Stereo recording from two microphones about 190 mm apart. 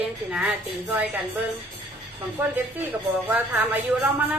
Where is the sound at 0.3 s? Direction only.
5° right (ahead or behind).